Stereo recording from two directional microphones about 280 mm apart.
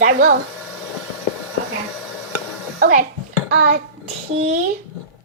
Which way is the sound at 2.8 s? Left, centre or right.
Right.